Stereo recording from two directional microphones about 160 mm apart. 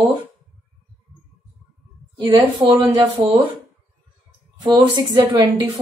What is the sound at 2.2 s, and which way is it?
A woman's voice, 30° right (ahead or behind).